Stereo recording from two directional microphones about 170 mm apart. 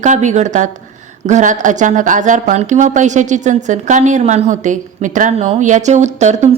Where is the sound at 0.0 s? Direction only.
45° right (ahead or behind).